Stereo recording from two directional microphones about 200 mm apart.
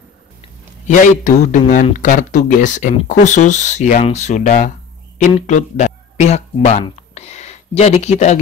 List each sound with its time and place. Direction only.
0.4 s a man's voice: 40° left (ahead or behind)